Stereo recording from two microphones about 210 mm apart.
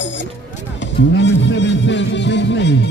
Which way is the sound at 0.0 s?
60° left (ahead or behind).